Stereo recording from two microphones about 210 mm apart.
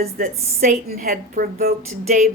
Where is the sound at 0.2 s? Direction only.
35° right (ahead or behind).